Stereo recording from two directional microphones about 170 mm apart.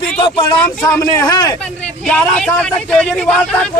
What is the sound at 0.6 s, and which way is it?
Speech, 10° left (ahead or behind).